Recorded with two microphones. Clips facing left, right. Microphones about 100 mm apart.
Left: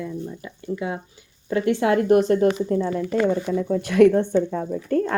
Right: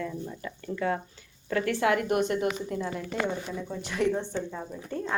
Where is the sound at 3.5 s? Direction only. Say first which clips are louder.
Left 12 dB; 60° left (ahead or behind).